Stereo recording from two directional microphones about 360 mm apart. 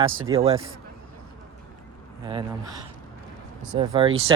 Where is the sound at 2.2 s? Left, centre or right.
Centre.